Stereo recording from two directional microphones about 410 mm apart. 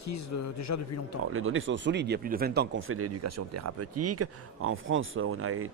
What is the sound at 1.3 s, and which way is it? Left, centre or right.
Speech, right.